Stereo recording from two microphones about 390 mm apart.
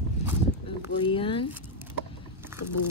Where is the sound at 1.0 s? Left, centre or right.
Centre.